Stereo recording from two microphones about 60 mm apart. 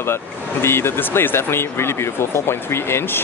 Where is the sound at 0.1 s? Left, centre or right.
Left.